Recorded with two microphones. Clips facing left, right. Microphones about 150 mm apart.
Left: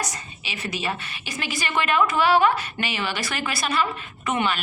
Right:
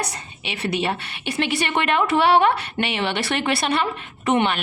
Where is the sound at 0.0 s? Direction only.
60° right (ahead or behind).